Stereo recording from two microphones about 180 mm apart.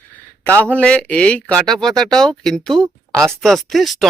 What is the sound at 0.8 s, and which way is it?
Speech, 5° left (ahead or behind).